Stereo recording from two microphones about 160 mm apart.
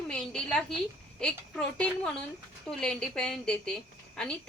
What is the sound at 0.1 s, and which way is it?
A woman's voice, 5° left (ahead or behind).